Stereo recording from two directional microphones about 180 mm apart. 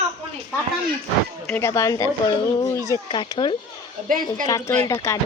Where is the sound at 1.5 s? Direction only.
15° left (ahead or behind).